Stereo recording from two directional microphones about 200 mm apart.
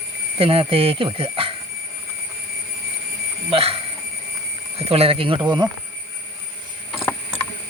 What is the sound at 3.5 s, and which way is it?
Speech, 30° right (ahead or behind).